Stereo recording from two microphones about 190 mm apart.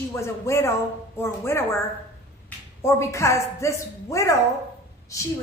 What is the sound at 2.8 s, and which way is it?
A woman's voice, 15° left (ahead or behind).